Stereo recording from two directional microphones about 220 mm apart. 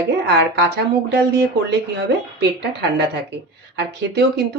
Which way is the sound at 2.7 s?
50° right (ahead or behind).